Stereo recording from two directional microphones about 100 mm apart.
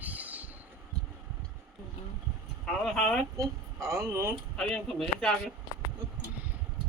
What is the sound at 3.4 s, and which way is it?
Speech, 30° right (ahead or behind).